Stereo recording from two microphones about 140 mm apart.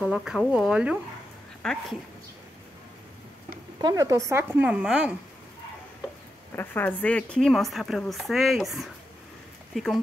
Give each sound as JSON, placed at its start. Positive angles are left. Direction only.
{"t": 0.0, "sound": "speech", "side_deg": -5}
{"t": 1.6, "sound": "speech", "side_deg": 5}
{"t": 3.8, "sound": "a woman's voice", "side_deg": -25}
{"t": 6.5, "sound": "speech", "side_deg": 15}